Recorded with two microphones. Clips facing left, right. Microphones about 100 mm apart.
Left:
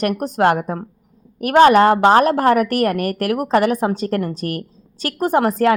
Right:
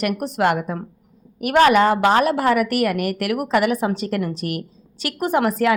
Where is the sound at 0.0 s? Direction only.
40° left (ahead or behind).